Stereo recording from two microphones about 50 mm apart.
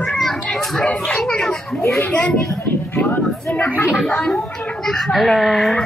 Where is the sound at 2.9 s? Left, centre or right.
Left.